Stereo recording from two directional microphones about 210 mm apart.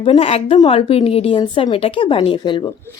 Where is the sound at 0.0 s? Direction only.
30° left (ahead or behind).